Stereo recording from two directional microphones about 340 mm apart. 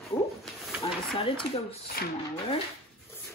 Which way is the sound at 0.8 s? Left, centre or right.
Centre.